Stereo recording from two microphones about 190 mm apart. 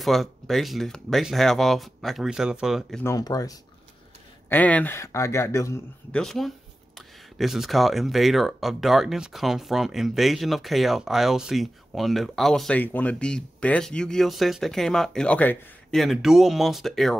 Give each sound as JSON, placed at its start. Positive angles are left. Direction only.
{"t": 0.0, "sound": "speech", "side_deg": 0}
{"t": 3.0, "sound": "speech", "side_deg": 15}
{"t": 4.5, "sound": "speech", "side_deg": 10}
{"t": 6.1, "sound": "speech", "side_deg": 0}